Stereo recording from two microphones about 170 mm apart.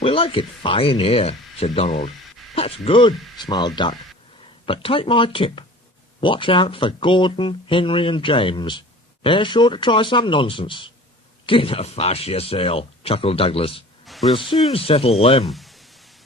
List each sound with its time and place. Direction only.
0.0 s speech: 30° left (ahead or behind)
14.1 s a sound: centre (ahead or behind)
14.7 s speech: 35° left (ahead or behind)
15.4 s speech: centre (ahead or behind)